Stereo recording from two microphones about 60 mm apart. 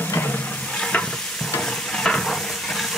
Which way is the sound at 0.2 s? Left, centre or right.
Left.